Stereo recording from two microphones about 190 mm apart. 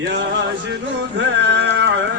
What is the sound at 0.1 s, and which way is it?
Chant, 65° right (ahead or behind).